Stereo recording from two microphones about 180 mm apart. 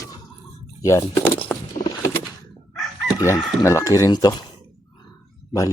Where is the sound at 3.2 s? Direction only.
15° left (ahead or behind).